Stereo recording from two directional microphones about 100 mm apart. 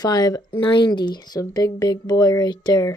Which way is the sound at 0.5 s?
55° left (ahead or behind).